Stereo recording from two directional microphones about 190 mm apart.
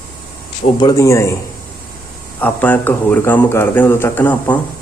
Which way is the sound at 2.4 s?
10° left (ahead or behind).